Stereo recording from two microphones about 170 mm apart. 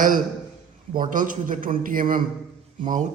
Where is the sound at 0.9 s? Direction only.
50° right (ahead or behind).